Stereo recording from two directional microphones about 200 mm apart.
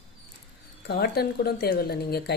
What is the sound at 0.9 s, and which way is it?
Speech, 50° left (ahead or behind).